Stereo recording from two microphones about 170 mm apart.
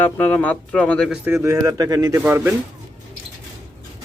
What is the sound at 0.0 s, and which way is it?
Speech, 10° left (ahead or behind).